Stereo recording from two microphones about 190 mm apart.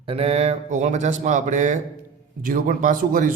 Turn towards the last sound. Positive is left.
turn(degrees=-45)  # may be behind; listen again after turning